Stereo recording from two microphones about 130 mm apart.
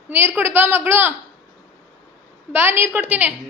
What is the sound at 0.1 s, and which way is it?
A woman's voice, 15° right (ahead or behind).